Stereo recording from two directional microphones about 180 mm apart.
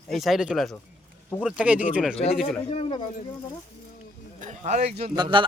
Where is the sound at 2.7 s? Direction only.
30° left (ahead or behind).